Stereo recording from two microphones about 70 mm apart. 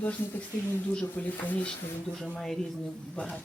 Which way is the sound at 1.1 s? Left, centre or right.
Left.